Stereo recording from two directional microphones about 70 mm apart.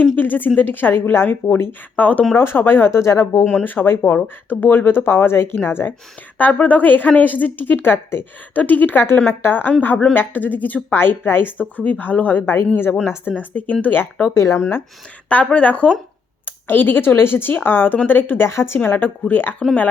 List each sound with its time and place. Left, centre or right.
0.0 s a woman's voice: left
3.5 s a woman's voice: left
14.3 s speech: left
15.3 s a woman's voice: centre
16.5 s speech: left